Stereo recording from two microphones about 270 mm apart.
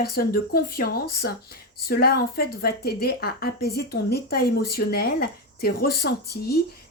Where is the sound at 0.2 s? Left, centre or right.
Left.